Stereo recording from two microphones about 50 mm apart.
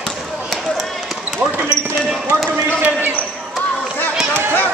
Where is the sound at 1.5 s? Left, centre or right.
Right.